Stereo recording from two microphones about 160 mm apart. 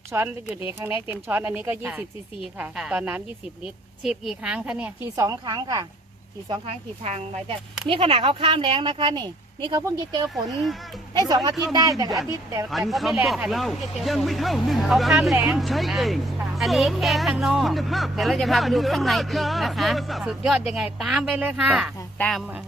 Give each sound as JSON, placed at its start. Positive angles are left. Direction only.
{"t": 0.1, "sound": "speech", "side_deg": -15}
{"t": 5.1, "sound": "a woman's voice", "side_deg": -20}
{"t": 6.5, "sound": "a woman's voice", "side_deg": -40}
{"t": 11.7, "sound": "a woman's voice", "side_deg": -25}
{"t": 12.9, "sound": "a woman's voice", "side_deg": 0}